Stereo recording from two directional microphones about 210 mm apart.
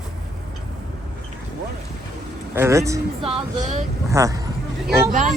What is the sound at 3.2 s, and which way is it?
Speech, 30° right (ahead or behind).